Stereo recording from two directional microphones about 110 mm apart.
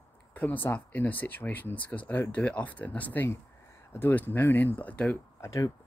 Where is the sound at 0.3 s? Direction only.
15° left (ahead or behind).